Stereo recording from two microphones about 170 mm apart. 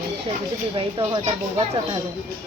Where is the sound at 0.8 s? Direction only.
30° right (ahead or behind).